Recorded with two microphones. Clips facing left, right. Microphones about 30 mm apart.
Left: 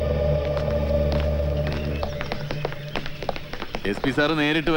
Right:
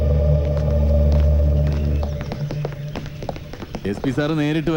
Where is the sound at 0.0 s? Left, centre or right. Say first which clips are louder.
Right 1 dB; left.